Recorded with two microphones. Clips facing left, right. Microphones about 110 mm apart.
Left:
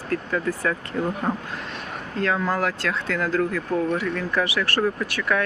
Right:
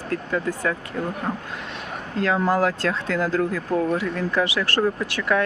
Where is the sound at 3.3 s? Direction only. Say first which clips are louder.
Right 1 dB; 15° right (ahead or behind).